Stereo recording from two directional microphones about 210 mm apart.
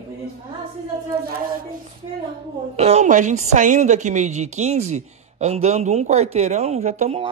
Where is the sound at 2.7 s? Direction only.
30° right (ahead or behind).